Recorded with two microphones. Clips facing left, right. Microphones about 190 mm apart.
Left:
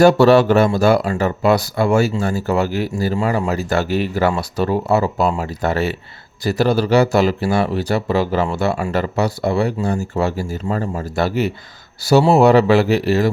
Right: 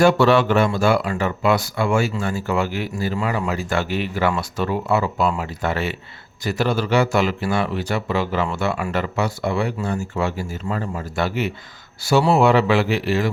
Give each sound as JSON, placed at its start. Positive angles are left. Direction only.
{"t": 0.0, "sound": "speech", "side_deg": 40}